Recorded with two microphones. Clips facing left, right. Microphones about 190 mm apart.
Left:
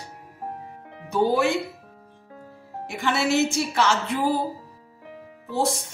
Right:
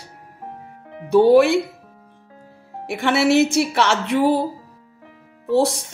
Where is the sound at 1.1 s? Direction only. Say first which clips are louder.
Right 9 dB; 80° right.